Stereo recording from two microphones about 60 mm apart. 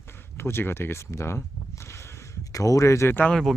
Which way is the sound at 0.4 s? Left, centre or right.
Left.